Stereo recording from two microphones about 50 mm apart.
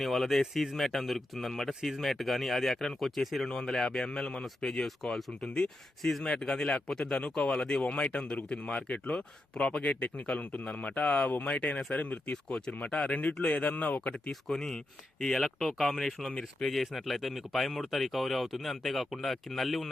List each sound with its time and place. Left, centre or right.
0.0 s speech: centre
6.0 s speech: centre
6.2 s speech: centre
14.4 s speech: centre